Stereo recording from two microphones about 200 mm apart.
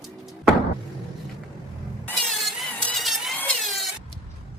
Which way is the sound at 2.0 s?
Centre (ahead or behind).